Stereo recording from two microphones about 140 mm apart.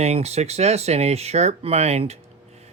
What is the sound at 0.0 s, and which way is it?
Speech, 50° right (ahead or behind).